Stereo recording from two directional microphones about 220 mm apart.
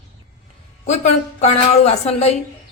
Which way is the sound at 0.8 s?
30° left (ahead or behind).